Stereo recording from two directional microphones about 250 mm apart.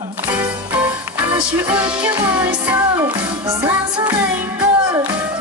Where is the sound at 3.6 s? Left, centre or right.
Centre.